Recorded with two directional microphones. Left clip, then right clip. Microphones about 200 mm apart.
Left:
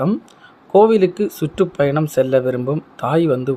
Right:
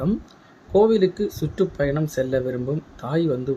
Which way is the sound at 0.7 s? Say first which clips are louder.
Left 5 dB; 25° left (ahead or behind).